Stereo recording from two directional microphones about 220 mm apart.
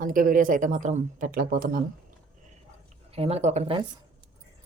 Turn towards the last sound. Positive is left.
turn(degrees=-25)  # may be behind; listen again after turning